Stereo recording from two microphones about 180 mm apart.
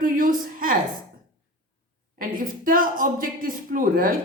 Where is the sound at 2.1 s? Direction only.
50° right (ahead or behind).